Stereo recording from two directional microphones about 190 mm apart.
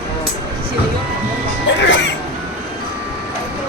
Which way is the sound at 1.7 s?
70° left (ahead or behind).